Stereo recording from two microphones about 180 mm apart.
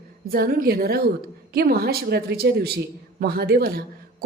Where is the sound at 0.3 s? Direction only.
55° right (ahead or behind).